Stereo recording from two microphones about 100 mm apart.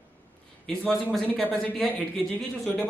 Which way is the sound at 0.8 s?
Centre (ahead or behind).